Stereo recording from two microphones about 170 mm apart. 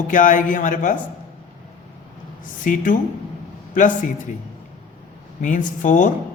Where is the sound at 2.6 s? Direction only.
50° left (ahead or behind).